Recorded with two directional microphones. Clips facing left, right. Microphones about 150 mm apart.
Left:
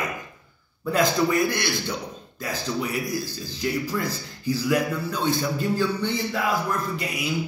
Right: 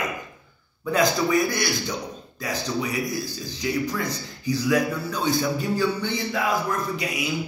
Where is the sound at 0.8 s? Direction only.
Centre (ahead or behind).